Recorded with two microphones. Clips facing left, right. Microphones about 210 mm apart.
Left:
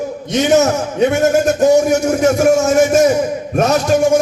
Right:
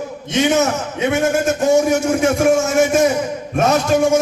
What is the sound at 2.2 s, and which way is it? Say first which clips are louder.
Speech: left 4 dB; 45° left (ahead or behind).